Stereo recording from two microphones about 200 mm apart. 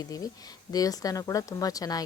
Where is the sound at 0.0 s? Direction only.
20° left (ahead or behind).